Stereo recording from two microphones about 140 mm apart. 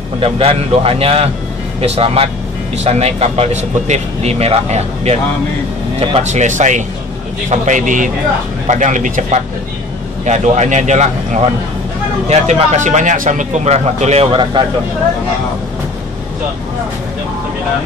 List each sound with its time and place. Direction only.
0.2 s speech: 45° right (ahead or behind)
14.5 s speech: 35° right (ahead or behind)